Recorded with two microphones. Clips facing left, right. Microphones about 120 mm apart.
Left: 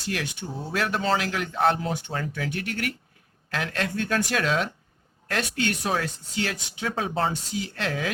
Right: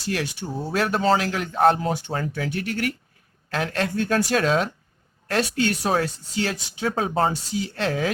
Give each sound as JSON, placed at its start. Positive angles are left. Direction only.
{"t": 0.1, "sound": "speech", "side_deg": -35}